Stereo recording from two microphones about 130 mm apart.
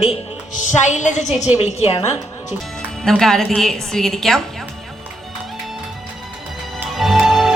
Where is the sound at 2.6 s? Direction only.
5° left (ahead or behind).